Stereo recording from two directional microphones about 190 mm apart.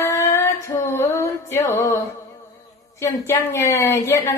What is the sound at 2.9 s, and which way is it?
Speech, 15° left (ahead or behind).